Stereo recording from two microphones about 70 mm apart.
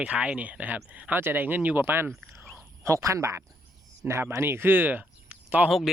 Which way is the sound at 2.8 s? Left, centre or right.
Right.